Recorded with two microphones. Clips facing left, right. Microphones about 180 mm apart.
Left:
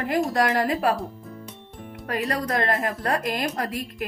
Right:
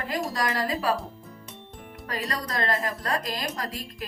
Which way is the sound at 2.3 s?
55° left (ahead or behind).